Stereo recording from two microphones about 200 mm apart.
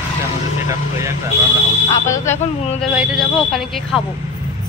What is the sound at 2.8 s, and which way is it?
A woman's voice, 5° right (ahead or behind).